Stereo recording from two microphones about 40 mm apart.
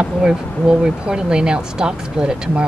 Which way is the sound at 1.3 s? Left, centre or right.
Right.